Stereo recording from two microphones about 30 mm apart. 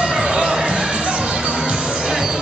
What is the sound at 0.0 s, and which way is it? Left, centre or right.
Music, right.